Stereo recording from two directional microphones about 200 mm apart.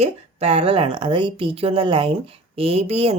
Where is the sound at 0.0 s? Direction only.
30° right (ahead or behind).